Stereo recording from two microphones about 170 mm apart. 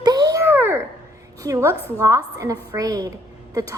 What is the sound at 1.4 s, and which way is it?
A woman's voice, 20° right (ahead or behind).